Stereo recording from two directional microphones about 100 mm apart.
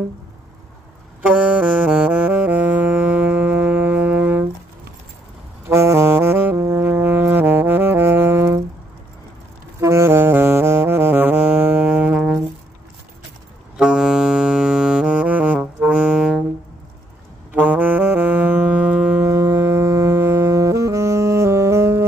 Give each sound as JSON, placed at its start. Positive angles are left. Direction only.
{"t": 1.2, "sound": "saxophone", "side_deg": -15}
{"t": 5.7, "sound": "brass instrument", "side_deg": -25}
{"t": 9.8, "sound": "saxophone", "side_deg": -30}
{"t": 13.7, "sound": "saxophone", "side_deg": -5}
{"t": 17.5, "sound": "saxophone", "side_deg": -15}
{"t": 19.2, "sound": "music", "side_deg": -30}